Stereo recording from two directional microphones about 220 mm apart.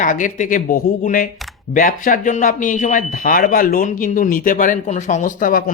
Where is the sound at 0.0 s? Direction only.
35° left (ahead or behind).